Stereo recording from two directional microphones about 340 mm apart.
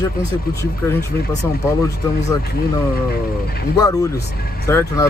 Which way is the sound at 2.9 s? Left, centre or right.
Left.